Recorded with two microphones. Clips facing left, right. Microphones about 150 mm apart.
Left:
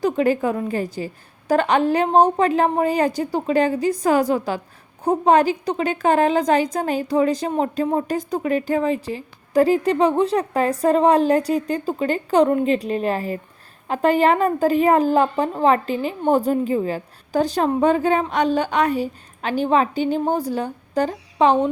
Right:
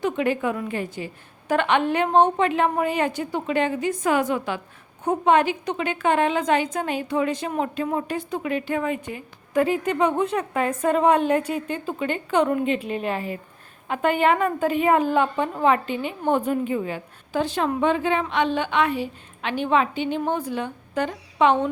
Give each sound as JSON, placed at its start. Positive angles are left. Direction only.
{"t": 0.0, "sound": "a woman's voice", "side_deg": 35}